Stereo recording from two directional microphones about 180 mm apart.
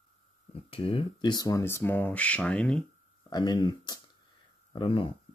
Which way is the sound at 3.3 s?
25° left (ahead or behind).